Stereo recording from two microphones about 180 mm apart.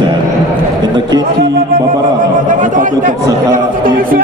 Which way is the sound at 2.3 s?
45° right (ahead or behind).